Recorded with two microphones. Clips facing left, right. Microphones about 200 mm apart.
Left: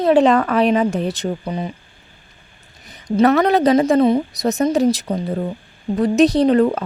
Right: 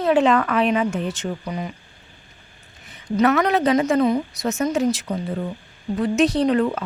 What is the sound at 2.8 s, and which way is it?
Speech, 35° left (ahead or behind).